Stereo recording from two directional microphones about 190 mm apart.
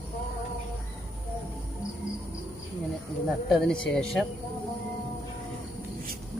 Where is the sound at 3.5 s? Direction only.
5° left (ahead or behind).